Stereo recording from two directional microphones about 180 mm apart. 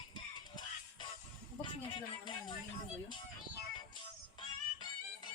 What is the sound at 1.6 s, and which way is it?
Music, 25° left (ahead or behind).